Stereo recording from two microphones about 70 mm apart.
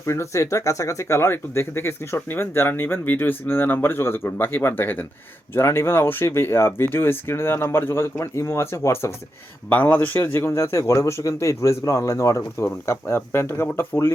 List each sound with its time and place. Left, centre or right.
0.0 s speech: left
9.6 s speech: left